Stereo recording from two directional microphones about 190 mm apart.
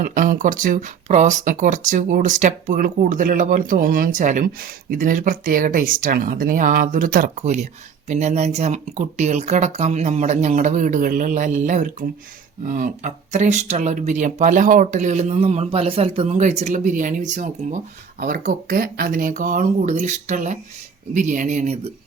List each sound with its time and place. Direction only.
0.0 s speech: 45° right (ahead or behind)